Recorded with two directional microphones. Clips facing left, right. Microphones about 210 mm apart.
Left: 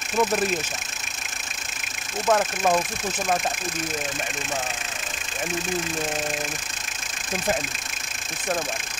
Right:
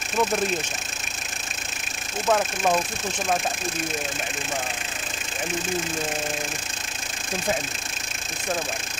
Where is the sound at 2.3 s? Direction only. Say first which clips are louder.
Left 1 dB; centre (ahead or behind).